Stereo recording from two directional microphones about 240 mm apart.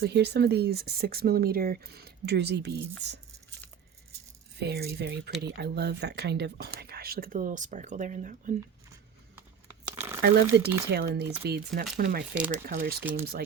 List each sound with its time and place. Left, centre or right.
0.0 s speech: right
4.6 s speech: right
9.9 s a sound: centre
10.2 s speech: right